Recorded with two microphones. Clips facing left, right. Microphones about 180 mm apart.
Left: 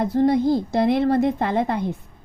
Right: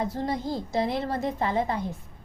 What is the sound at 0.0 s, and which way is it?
A woman's voice, 65° left (ahead or behind).